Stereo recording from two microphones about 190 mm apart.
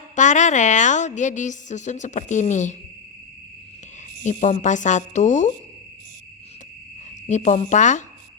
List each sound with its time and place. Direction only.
0.2 s a woman's voice: 40° left (ahead or behind)
4.2 s a woman's voice: 40° left (ahead or behind)
7.3 s a woman's voice: 40° left (ahead or behind)